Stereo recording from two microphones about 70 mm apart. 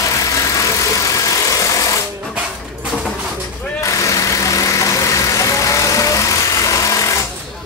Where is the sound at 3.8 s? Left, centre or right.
Left.